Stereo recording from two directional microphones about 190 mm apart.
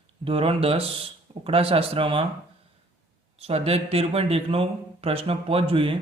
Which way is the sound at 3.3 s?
30° right (ahead or behind).